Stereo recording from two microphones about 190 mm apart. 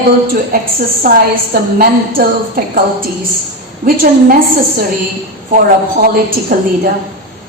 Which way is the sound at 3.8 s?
50° right (ahead or behind).